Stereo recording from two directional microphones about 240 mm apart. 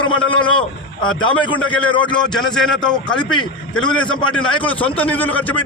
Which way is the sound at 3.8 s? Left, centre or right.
Centre.